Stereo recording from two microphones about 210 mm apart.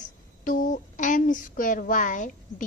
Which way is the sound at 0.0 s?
40° left (ahead or behind).